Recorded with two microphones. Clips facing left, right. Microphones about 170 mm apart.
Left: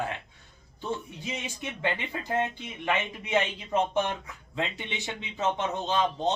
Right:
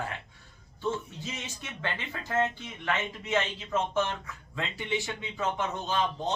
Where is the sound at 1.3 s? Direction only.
15° left (ahead or behind).